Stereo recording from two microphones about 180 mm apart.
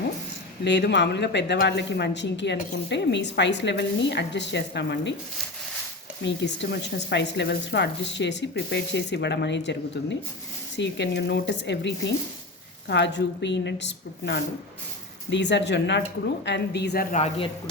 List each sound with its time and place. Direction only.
0.6 s speech: 75° left (ahead or behind)
6.2 s speech: 75° left (ahead or behind)
17.1 s a man's voice: 40° left (ahead or behind)